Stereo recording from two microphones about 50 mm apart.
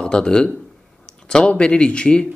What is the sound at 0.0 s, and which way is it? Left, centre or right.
Speech, centre.